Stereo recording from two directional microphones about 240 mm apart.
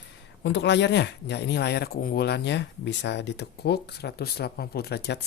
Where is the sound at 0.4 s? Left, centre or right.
Left.